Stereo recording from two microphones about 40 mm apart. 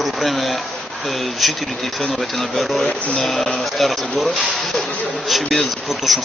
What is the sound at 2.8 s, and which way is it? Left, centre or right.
Speech, left.